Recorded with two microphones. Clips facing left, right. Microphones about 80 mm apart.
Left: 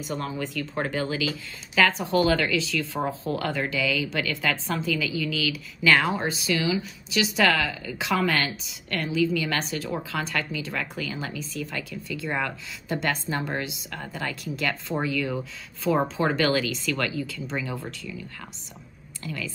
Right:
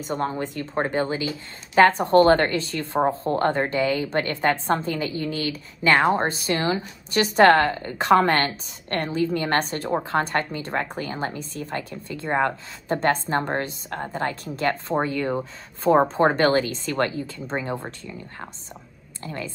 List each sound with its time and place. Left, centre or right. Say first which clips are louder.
0.0 s a woman's voice: right 4 dB; right